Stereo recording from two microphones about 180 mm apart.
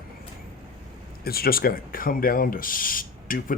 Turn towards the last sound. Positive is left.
turn(degrees=50)  # may be behind; listen again after turning